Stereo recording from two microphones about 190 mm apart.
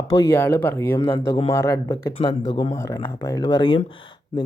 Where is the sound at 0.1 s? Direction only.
15° left (ahead or behind).